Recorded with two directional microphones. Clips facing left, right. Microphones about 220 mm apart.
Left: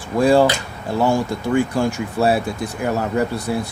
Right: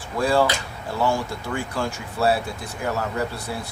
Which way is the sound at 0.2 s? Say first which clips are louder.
Left 6 dB; 15° left (ahead or behind).